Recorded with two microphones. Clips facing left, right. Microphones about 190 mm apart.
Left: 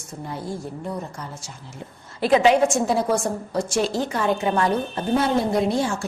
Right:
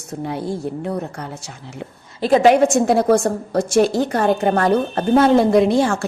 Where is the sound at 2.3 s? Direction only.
45° right (ahead or behind).